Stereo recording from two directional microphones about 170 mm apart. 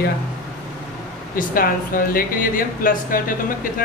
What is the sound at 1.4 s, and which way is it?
Speech, 55° left (ahead or behind).